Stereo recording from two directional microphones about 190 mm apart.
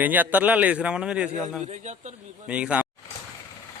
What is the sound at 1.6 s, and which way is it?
Speech, 40° right (ahead or behind).